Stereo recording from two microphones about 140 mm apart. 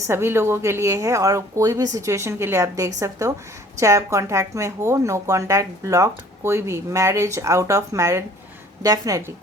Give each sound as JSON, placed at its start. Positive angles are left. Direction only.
{"t": 0.0, "sound": "a woman's voice", "side_deg": -20}